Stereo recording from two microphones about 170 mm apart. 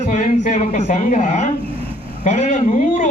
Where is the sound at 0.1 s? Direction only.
40° left (ahead or behind).